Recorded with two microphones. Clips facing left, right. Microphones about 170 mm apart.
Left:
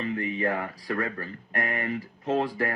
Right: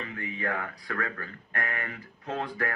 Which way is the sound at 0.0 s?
20° left (ahead or behind).